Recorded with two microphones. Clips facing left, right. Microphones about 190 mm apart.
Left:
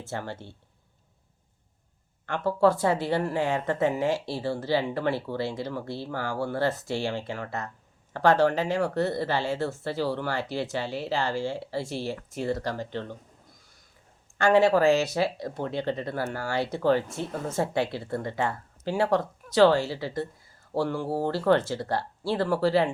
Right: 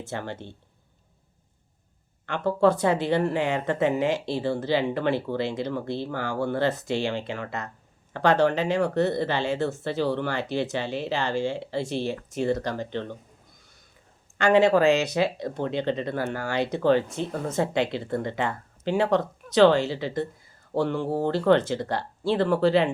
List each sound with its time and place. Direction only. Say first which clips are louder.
0.0 s speech: right 2 dB; 20° right (ahead or behind)
2.6 s speech: right 1 dB; 20° right (ahead or behind)
14.3 s speech: right 1 dB; 20° right (ahead or behind)